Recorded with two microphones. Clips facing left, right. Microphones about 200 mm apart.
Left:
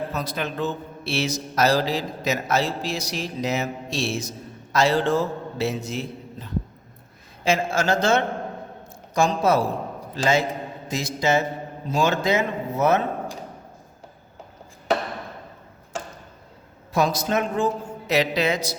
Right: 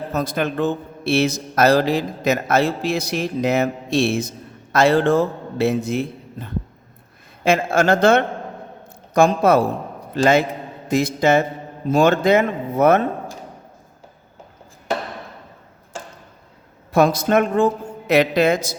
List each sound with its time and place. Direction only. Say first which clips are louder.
0.1 s a man's voice: right 6 dB; 50° right (ahead or behind)
16.9 s a man's voice: right 6 dB; 55° right (ahead or behind)